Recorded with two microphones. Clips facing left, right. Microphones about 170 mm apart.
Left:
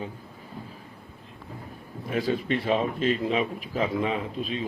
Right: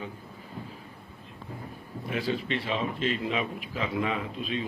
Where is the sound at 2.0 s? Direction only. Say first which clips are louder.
Left 4 dB; 40° left (ahead or behind).